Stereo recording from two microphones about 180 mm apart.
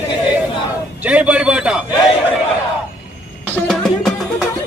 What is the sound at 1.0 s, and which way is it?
Speech, 5° right (ahead or behind).